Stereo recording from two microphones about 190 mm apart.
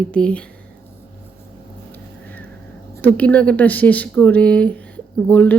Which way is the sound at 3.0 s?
10° left (ahead or behind).